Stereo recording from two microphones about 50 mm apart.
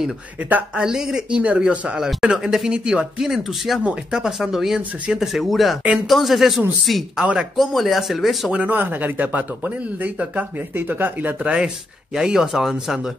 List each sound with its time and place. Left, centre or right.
0.4 s speech: right
0.7 s speech: centre
1.4 s speech: right; by 8.5 s centre
8.6 s speech: right
10.8 s speech: right
11.4 s speech: centre